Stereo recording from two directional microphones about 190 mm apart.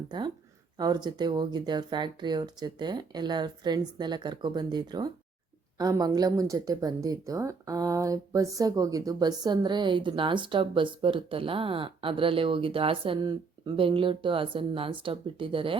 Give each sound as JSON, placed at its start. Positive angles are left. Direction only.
{"t": 0.8, "sound": "speech", "side_deg": -20}